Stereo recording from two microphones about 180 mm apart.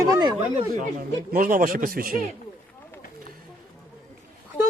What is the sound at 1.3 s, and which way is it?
Speech, 50° right (ahead or behind).